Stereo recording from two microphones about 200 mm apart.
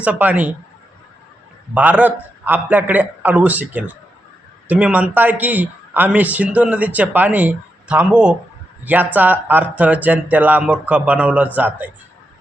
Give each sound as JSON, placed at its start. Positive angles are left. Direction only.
{"t": 0.0, "sound": "speech", "side_deg": -5}
{"t": 1.7, "sound": "speech", "side_deg": -5}